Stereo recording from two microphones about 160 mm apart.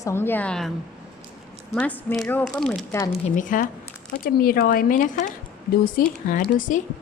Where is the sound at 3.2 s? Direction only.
55° left (ahead or behind).